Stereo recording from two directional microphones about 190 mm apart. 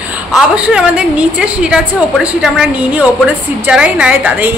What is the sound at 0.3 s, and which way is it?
A woman's voice, 5° right (ahead or behind).